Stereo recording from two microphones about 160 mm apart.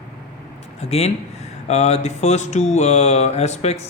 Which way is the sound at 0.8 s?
40° left (ahead or behind).